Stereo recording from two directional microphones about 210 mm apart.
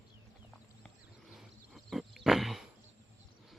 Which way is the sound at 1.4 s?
Centre (ahead or behind).